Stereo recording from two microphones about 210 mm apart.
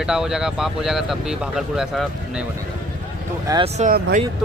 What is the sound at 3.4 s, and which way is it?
Speech, 20° right (ahead or behind).